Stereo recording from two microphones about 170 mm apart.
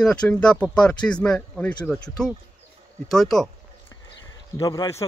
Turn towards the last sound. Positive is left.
turn(degrees=20)  # may be behind; listen again after turning